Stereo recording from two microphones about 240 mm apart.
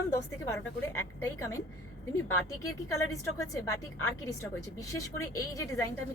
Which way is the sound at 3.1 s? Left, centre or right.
Centre.